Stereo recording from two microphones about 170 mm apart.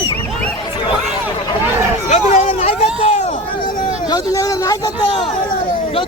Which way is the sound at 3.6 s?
25° left (ahead or behind).